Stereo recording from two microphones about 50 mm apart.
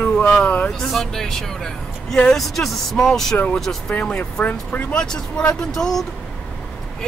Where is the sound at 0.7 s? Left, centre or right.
Centre.